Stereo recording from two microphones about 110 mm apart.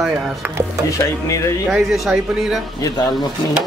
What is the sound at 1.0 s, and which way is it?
Speech, 30° left (ahead or behind).